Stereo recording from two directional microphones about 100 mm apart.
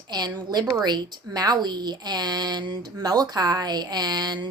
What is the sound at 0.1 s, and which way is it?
A woman's voice, 45° right (ahead or behind).